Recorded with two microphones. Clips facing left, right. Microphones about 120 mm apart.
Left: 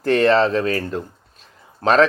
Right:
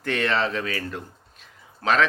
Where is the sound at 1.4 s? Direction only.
35° left (ahead or behind).